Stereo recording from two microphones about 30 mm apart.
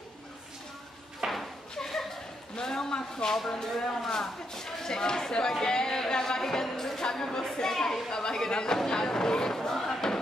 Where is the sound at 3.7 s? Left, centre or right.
Centre.